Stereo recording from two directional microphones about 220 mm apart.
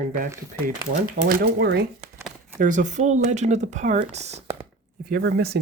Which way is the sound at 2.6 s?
35° right (ahead or behind).